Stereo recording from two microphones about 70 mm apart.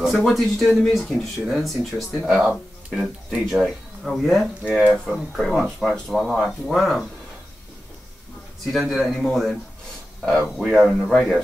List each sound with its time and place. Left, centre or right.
0.0 s speech: centre
4.0 s speech: centre
4.6 s speech: centre
5.1 s speech: centre
8.7 s speech: centre